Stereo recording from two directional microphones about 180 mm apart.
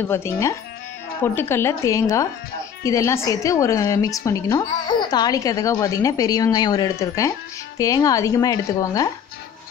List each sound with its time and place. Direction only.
0.1 s a woman's voice: 15° left (ahead or behind)